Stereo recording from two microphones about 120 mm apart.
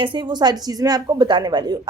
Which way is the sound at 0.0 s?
40° right (ahead or behind).